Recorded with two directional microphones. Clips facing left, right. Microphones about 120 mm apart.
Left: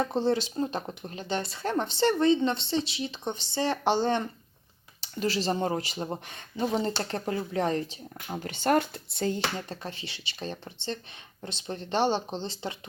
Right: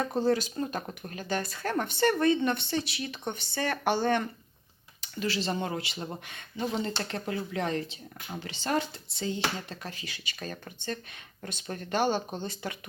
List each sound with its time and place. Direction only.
0.0 s speech: 25° left (ahead or behind)
4.9 s speech: 35° left (ahead or behind)
8.4 s speech: 55° left (ahead or behind)
9.6 s speech: 30° left (ahead or behind)